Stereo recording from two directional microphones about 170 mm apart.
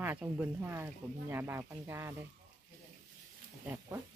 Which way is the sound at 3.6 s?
20° right (ahead or behind).